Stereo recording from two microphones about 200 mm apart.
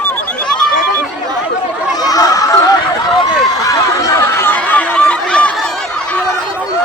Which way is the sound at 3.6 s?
15° left (ahead or behind).